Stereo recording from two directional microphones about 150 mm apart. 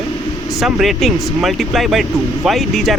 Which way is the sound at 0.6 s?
Centre (ahead or behind).